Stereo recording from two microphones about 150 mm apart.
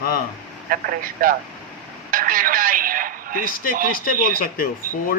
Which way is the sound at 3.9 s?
70° left (ahead or behind).